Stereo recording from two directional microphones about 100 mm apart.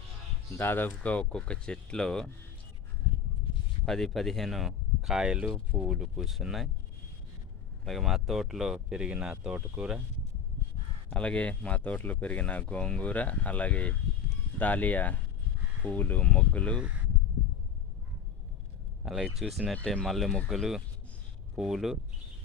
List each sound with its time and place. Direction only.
0.5 s speech: 20° left (ahead or behind)
3.8 s speech: 5° left (ahead or behind)
7.9 s speech: centre (ahead or behind)
11.1 s speech: 10° left (ahead or behind)
19.0 s speech: centre (ahead or behind)
19.7 s speech: 10° left (ahead or behind)